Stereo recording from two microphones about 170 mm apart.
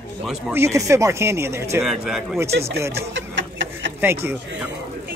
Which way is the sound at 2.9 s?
90° right.